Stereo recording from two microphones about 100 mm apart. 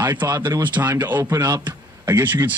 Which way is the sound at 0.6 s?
20° right (ahead or behind).